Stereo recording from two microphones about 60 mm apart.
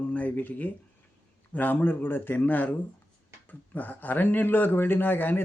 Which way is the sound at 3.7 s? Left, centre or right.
Left.